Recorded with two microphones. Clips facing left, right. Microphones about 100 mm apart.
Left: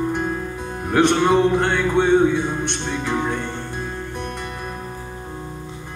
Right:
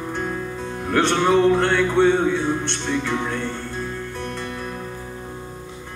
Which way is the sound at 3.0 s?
20° left (ahead or behind).